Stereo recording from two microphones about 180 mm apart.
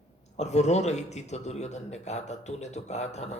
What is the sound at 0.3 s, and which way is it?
Speech, 40° left (ahead or behind).